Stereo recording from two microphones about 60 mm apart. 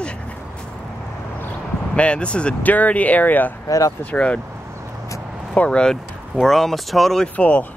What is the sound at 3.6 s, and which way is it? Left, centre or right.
Speech, left.